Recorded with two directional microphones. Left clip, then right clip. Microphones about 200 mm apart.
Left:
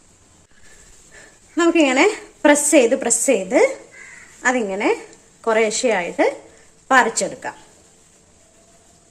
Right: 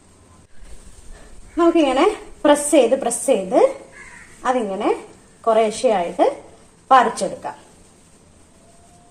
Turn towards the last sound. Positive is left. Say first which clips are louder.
# right 2 dB
turn(degrees=40)  # may be behind; listen again after turning